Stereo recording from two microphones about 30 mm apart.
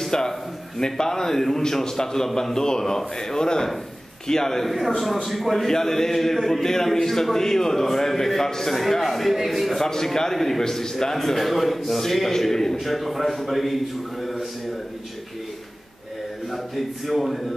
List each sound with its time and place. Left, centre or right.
0.0 s a sound: centre
0.7 s a man's voice: left
4.6 s a man's voice: centre
5.7 s a man's voice: centre
9.8 s a man's voice: centre
12.7 s a man's voice: centre
14.2 s a sound: centre
16.4 s a man's voice: centre